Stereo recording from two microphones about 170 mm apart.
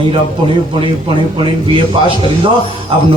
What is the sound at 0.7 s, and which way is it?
A man's voice, 30° right (ahead or behind).